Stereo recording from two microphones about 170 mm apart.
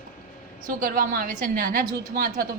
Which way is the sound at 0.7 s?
55° right (ahead or behind).